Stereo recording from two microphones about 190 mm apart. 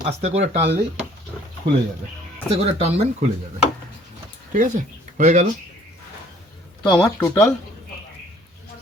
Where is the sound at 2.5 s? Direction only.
35° right (ahead or behind).